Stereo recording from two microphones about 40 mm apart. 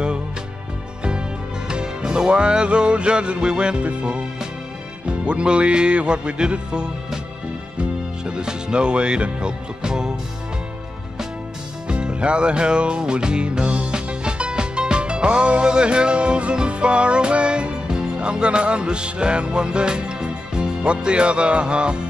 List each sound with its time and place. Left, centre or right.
1.7 s music: right
8.3 s music: right
11.9 s music: right